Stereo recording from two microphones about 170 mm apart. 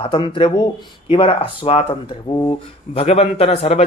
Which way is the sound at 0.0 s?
30° left (ahead or behind).